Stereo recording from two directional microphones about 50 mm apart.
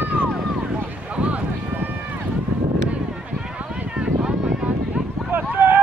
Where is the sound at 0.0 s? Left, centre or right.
Right.